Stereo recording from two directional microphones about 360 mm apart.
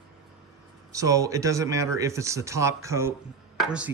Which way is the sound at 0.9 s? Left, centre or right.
Centre.